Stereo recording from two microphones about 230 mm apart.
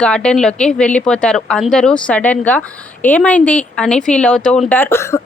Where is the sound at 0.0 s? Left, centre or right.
Centre.